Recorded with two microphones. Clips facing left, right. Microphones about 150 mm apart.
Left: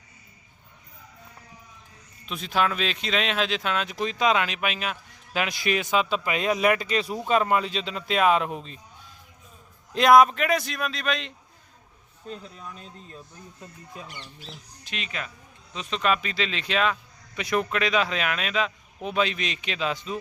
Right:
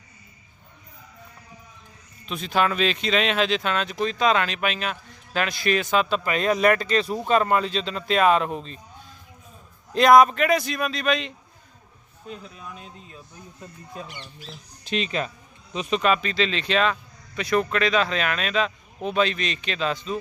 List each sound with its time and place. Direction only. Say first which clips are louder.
2.2 s speech: right 2 dB; 5° left (ahead or behind)
9.9 s speech: right 2 dB; 5° left (ahead or behind)
14.8 s speech: right 9 dB; 30° right (ahead or behind)
15.7 s speech: right 7 dB; 15° right (ahead or behind)
16.0 s speech: right 3 dB; centre (ahead or behind)